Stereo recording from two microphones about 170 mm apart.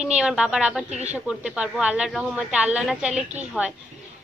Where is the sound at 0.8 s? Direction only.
40° right (ahead or behind).